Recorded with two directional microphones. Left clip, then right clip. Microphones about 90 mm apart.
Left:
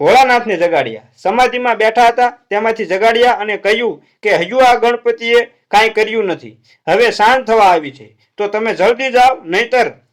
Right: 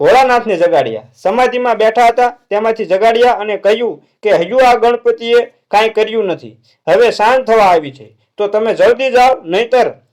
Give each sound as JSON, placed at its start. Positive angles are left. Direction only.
{"t": 0.0, "sound": "speech", "side_deg": -20}